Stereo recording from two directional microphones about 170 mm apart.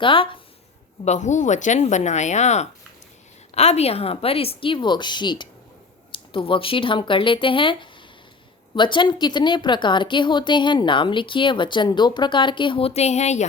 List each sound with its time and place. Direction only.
0.0 s speech: 30° left (ahead or behind)
1.0 s a woman's voice: 45° left (ahead or behind)